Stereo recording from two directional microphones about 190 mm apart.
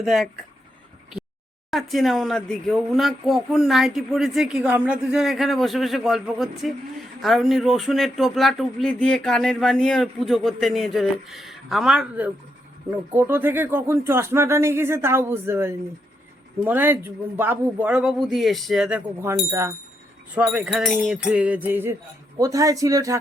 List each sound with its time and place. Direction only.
0.0 s speech: centre (ahead or behind)
1.7 s a man's voice: centre (ahead or behind); by 23.1 s 15° right (ahead or behind)